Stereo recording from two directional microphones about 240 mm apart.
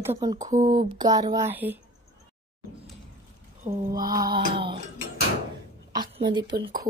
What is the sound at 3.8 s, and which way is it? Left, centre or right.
Music, centre.